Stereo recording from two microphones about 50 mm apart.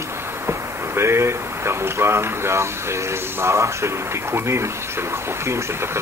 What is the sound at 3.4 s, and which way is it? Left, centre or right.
Speech, right.